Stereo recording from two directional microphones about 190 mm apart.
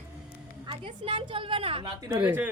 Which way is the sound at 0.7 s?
25° right (ahead or behind).